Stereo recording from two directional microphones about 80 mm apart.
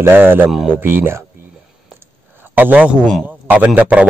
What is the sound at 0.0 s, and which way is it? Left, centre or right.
Speech, right.